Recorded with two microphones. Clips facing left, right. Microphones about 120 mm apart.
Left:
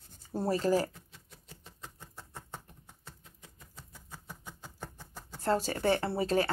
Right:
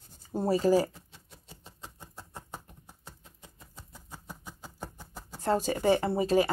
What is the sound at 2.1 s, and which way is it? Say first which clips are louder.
Patter: right 3 dB; 15° right (ahead or behind).